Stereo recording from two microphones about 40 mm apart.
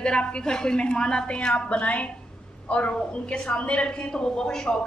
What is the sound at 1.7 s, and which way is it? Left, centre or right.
A woman's voice, left.